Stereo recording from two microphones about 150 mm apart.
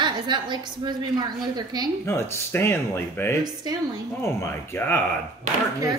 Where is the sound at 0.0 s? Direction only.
30° right (ahead or behind).